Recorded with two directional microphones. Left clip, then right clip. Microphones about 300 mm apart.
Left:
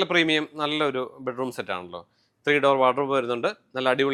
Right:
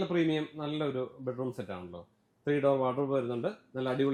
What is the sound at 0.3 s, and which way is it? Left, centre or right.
Speech, centre.